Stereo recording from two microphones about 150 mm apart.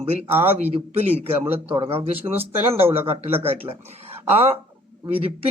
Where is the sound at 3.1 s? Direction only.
45° right (ahead or behind).